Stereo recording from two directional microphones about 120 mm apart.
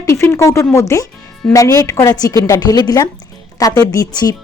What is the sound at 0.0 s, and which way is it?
A woman's voice, 20° left (ahead or behind).